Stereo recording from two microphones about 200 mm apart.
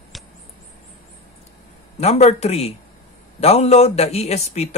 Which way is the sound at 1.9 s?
35° left (ahead or behind).